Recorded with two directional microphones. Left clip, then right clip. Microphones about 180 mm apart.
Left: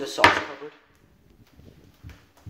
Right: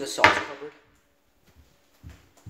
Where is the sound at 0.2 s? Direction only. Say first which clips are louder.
Left 1 dB; 5° right (ahead or behind).